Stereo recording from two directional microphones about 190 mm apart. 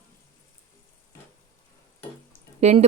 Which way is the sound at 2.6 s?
35° right (ahead or behind).